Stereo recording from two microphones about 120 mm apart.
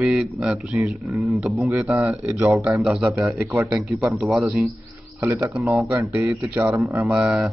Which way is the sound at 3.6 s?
5° right (ahead or behind).